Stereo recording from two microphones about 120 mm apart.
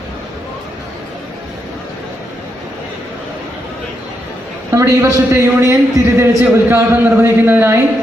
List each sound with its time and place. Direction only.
4.7 s a man's voice: 25° right (ahead or behind)